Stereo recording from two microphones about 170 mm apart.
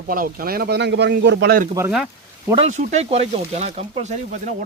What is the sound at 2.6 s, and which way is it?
Speech, 45° right (ahead or behind).